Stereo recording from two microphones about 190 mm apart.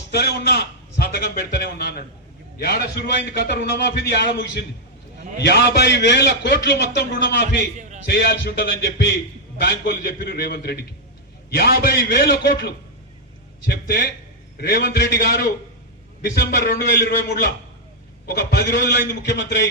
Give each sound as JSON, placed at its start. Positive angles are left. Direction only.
{"t": 0.1, "sound": "a man's voice", "side_deg": 60}
{"t": 7.8, "sound": "a sound", "side_deg": -40}
{"t": 8.0, "sound": "a man's voice", "side_deg": 55}